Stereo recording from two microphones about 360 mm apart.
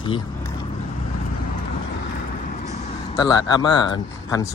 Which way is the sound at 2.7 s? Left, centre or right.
Centre.